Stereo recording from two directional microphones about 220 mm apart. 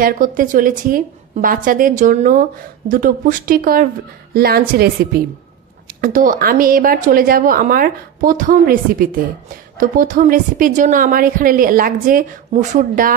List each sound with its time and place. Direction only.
0.0 s a woman's voice: 40° right (ahead or behind)